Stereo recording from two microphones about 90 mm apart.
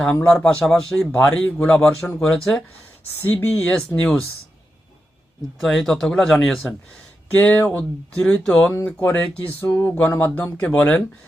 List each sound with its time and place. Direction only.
0.0 s speech: 15° left (ahead or behind)
1.2 s speech: 15° left (ahead or behind)
3.7 s speech: 10° left (ahead or behind)
5.5 s speech: 5° left (ahead or behind)
7.3 s speech: 20° left (ahead or behind)